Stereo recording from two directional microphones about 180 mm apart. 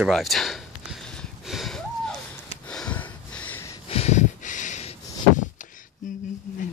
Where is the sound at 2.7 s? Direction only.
5° left (ahead or behind).